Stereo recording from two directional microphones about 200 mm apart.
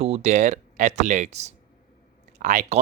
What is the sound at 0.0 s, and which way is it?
Speech, 30° right (ahead or behind).